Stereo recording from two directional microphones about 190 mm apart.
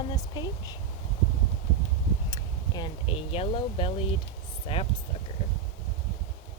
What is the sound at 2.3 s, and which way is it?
Speech, 20° left (ahead or behind).